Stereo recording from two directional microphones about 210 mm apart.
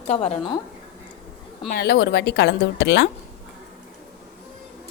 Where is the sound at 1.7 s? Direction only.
50° left (ahead or behind).